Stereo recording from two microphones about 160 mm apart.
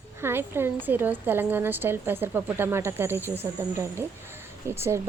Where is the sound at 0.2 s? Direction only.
15° right (ahead or behind).